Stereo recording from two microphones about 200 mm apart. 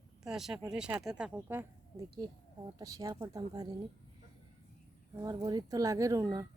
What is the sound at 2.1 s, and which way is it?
A woman's voice, 20° right (ahead or behind).